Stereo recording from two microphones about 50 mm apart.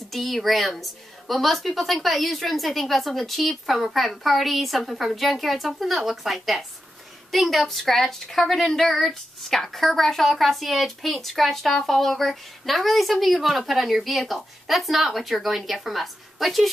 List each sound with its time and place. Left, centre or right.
0.1 s a woman's voice: centre